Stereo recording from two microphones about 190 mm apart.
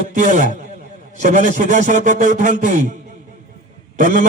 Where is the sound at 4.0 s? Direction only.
40° right (ahead or behind).